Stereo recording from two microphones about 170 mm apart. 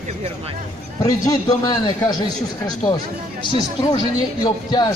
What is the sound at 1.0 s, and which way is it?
Speech, 20° left (ahead or behind).